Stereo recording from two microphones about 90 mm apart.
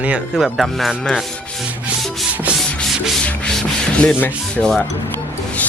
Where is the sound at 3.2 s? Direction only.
10° left (ahead or behind).